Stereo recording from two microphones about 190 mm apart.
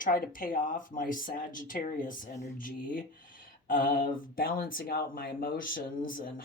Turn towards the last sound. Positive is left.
turn(degrees=45)  # may be behind; listen again after turning